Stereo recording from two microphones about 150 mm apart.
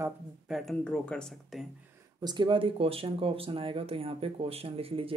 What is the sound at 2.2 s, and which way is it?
Speech, 30° right (ahead or behind).